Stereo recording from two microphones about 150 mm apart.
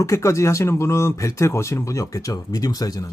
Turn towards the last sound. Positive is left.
turn(degrees=25)  # may be behind; listen again after turning